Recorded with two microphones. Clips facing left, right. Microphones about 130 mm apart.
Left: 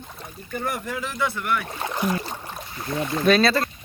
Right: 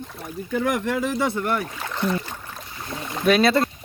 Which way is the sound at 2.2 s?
25° left (ahead or behind).